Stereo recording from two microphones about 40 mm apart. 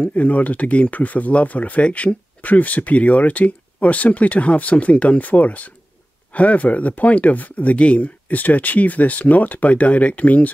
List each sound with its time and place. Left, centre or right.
0.0 s speech: left
5.2 s speech: left